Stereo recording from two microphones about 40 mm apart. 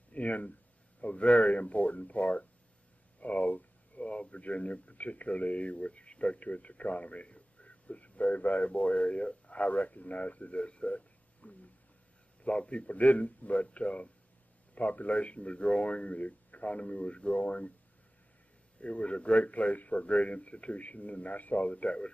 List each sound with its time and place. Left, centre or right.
0.1 s a man's voice: left
18.8 s a man's voice: left